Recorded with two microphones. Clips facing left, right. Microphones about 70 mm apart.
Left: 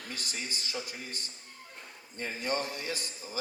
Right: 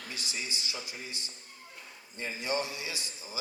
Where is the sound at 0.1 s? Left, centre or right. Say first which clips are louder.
Even; left.